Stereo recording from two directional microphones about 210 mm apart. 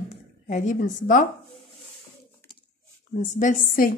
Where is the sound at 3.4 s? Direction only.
40° left (ahead or behind).